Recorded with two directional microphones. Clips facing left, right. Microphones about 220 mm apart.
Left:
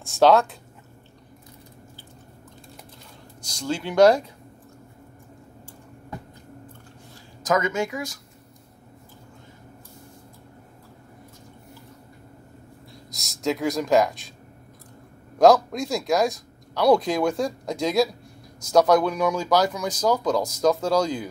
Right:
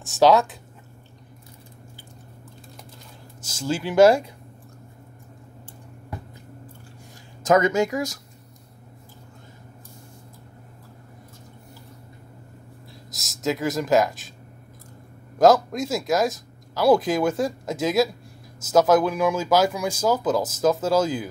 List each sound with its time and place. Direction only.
0.0 s speech: centre (ahead or behind)
3.4 s speech: 5° right (ahead or behind)
7.4 s speech: 35° right (ahead or behind)
13.1 s speech: centre (ahead or behind)
15.3 s speech: centre (ahead or behind)